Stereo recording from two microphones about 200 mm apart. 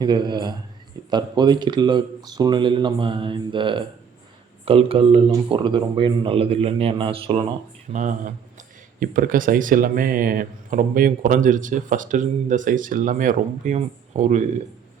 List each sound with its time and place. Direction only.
0.0 s speech: 20° right (ahead or behind)
7.9 s speech: 40° right (ahead or behind)